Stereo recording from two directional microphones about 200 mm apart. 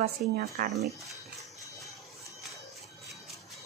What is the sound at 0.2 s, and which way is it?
Speech, 45° right (ahead or behind).